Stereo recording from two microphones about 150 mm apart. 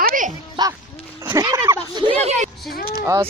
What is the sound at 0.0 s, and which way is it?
Music, 65° right (ahead or behind).